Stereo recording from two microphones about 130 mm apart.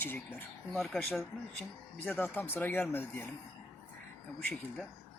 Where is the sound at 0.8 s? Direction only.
5° left (ahead or behind).